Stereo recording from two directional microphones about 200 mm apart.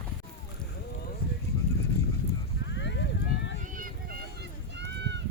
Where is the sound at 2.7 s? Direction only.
60° left (ahead or behind).